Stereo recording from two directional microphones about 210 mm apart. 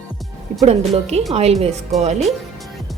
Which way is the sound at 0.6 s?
30° right (ahead or behind).